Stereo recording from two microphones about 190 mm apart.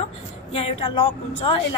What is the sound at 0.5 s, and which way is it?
A woman's voice, 30° left (ahead or behind).